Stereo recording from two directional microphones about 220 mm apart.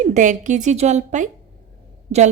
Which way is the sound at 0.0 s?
35° right (ahead or behind).